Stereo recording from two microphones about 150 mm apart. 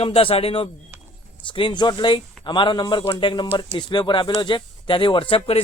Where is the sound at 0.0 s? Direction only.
40° left (ahead or behind).